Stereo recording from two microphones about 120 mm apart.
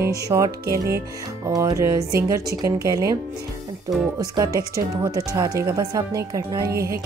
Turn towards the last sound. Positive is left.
turn(degrees=-25)  # may be behind; listen again after turning